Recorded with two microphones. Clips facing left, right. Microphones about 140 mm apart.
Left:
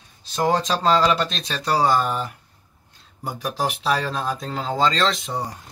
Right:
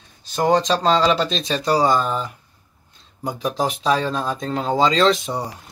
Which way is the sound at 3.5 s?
5° left (ahead or behind).